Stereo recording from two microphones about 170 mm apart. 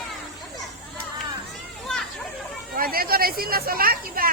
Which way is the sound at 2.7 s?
60° right (ahead or behind).